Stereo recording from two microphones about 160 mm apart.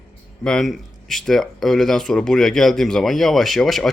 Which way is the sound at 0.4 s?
Centre (ahead or behind).